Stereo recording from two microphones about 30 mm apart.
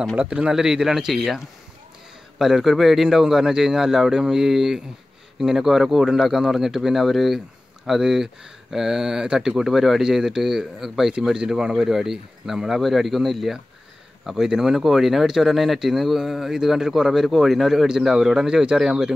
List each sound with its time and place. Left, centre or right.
0.3 s a man's voice: right
2.3 s speech: centre
7.1 s speech: centre
7.3 s a sound: centre
8.0 s speech: centre
10.0 s speech: centre
11.3 s speech: right